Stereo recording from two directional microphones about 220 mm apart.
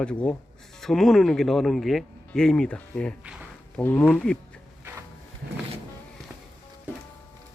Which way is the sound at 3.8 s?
5° left (ahead or behind).